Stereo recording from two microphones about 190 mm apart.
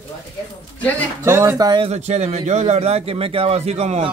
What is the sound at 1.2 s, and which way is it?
Speech, 15° right (ahead or behind).